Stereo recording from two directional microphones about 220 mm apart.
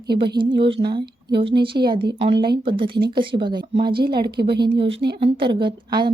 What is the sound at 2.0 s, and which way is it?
Speech, 50° right (ahead or behind).